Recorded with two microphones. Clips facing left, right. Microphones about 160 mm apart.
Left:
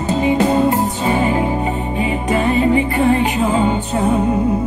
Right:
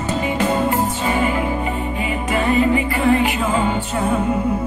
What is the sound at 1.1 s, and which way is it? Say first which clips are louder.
Music: left 5 dB; 30° left (ahead or behind).